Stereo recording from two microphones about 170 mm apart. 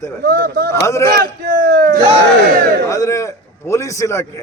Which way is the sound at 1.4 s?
55° right (ahead or behind).